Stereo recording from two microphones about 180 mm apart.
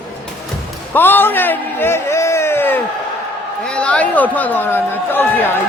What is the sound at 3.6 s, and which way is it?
Speech, 5° left (ahead or behind).